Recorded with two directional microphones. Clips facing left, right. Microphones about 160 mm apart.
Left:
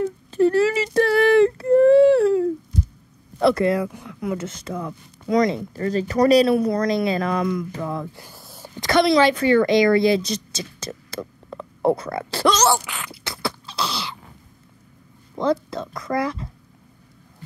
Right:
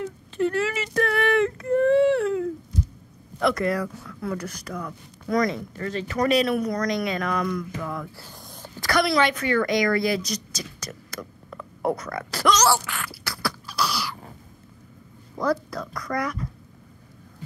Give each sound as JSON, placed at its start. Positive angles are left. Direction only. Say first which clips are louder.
{"t": 0.0, "sound": "a sound", "louder": "left 7 dB", "side_deg": 35}
{"t": 3.3, "sound": "speech", "louder": "left 5 dB", "side_deg": 30}
{"t": 5.7, "sound": "speech", "louder": "left 6 dB", "side_deg": 35}
{"t": 8.2, "sound": "a woman's voice", "louder": "left 1 dB", "side_deg": 5}
{"t": 12.7, "sound": "beatboxing", "louder": "left 1 dB", "side_deg": 20}
{"t": 15.3, "sound": "speech", "louder": "left 3 dB", "side_deg": 25}